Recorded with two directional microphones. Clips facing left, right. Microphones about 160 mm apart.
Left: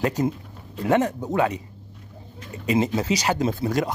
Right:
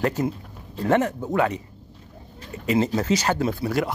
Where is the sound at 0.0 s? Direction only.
15° left (ahead or behind).